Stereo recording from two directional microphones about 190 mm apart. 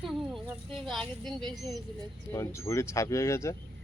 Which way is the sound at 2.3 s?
15° left (ahead or behind).